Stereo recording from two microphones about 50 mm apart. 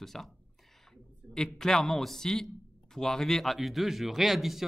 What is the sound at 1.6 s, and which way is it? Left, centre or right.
A man's voice, centre.